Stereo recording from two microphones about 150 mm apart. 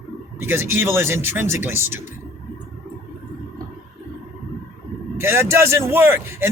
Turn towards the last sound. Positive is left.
turn(degrees=-15)  # may be behind; listen again after turning